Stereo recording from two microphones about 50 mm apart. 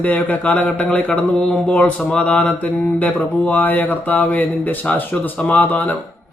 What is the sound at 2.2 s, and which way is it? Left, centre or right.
Mantra, left.